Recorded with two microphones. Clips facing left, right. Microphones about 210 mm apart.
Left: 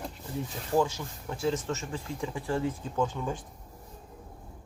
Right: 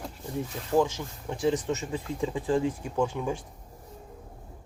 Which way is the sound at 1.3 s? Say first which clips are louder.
Right 3 dB; 15° right (ahead or behind).